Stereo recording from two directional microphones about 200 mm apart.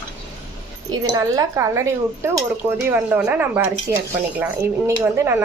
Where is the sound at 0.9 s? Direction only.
15° right (ahead or behind).